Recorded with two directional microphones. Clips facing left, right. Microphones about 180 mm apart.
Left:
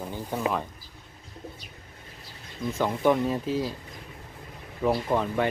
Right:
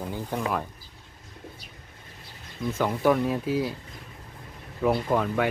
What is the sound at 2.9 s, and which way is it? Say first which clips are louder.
Speech: even; centre (ahead or behind).